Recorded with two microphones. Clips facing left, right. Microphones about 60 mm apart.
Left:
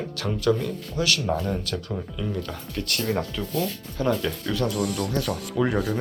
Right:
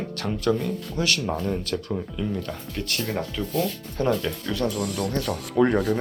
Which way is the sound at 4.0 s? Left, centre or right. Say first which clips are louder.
Right 1 dB; right.